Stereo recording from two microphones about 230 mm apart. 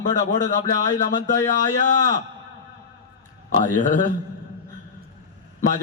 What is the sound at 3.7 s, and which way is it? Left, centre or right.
Speech, left.